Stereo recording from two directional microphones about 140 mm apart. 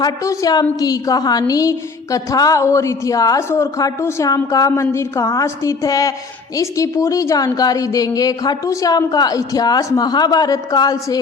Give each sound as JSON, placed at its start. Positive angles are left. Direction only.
{"t": 0.0, "sound": "a woman's voice", "side_deg": 25}